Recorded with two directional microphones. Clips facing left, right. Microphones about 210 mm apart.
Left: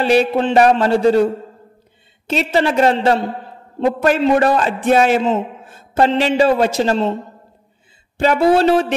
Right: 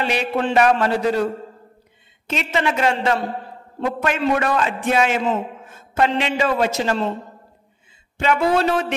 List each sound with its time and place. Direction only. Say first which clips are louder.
0.0 s a man's voice: left 9 dB; 35° left (ahead or behind)
0.3 s a man's voice: left 4 dB; 25° left (ahead or behind)
8.2 s a man's voice: left 5 dB; 35° left (ahead or behind)